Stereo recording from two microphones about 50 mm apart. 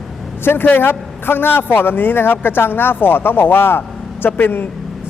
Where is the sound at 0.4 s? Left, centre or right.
Left.